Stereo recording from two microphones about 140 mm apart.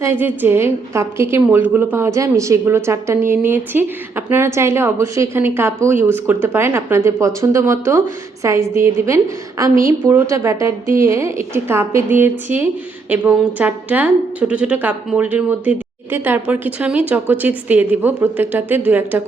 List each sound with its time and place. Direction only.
0.0 s a woman's voice: 15° right (ahead or behind)